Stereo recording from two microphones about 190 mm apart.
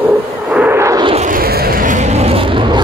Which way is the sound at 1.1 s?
45° right (ahead or behind).